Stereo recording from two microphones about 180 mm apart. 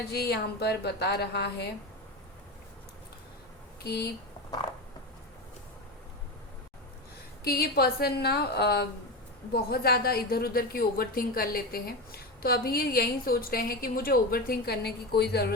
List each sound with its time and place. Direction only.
0.0 s a woman's voice: 65° left (ahead or behind)
3.8 s a woman's voice: 65° left (ahead or behind)
7.4 s a woman's voice: 60° left (ahead or behind)